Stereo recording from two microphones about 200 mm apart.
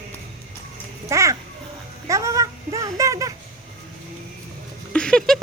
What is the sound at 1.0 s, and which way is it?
Children playing, 15° right (ahead or behind).